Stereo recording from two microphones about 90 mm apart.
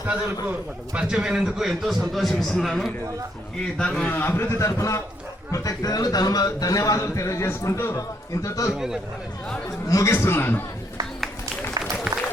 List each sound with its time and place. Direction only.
0.9 s a man's voice: 10° right (ahead or behind); by 4.2 s 15° left (ahead or behind)
4.2 s a man's voice: 25° left (ahead or behind)
12.1 s a sound: 10° right (ahead or behind)